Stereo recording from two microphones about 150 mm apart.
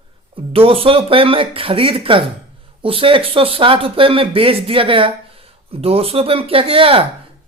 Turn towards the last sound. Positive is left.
turn(degrees=-40)  # may be behind; listen again after turning